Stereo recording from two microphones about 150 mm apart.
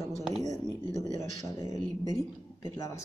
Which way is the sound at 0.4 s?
50° right (ahead or behind).